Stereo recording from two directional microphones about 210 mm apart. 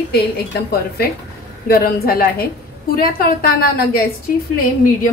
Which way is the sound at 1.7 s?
45° left (ahead or behind).